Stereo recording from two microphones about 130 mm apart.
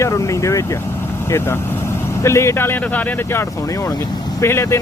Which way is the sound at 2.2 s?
20° left (ahead or behind).